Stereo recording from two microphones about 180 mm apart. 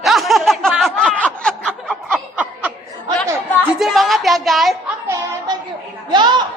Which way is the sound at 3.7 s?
Centre (ahead or behind).